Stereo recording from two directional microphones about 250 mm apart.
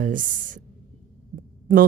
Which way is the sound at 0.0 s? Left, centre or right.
Right.